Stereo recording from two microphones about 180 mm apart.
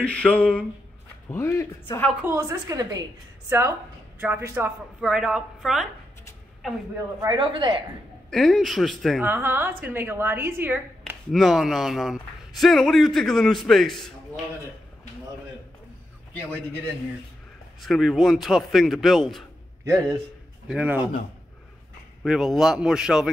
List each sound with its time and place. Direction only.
0.0 s speech: 5° left (ahead or behind)
2.2 s a woman's voice: 15° right (ahead or behind)
7.2 s a woman's voice: 25° right (ahead or behind)
8.3 s a man's voice: 5° left (ahead or behind)
9.2 s a woman's voice: 10° right (ahead or behind)
11.3 s a man's voice: centre (ahead or behind)
17.8 s a man's voice: centre (ahead or behind)
19.8 s a man's voice: 15° right (ahead or behind)
22.2 s a man's voice: centre (ahead or behind)